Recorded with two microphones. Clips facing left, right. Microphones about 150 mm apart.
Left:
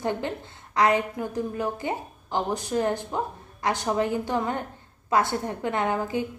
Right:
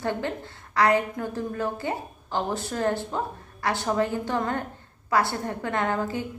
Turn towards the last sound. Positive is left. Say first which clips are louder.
# left 1 dB
turn(degrees=15)  # may be behind; listen again after turning